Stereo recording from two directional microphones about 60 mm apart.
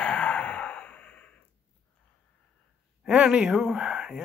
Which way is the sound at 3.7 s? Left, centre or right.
Centre.